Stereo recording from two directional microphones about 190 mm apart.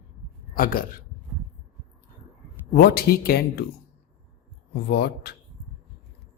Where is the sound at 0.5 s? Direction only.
50° left (ahead or behind).